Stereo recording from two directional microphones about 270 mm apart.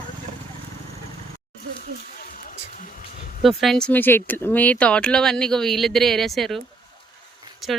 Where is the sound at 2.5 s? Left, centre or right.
Left.